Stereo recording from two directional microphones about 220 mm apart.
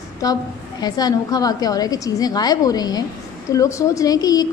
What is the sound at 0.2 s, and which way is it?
A woman's voice, 15° left (ahead or behind).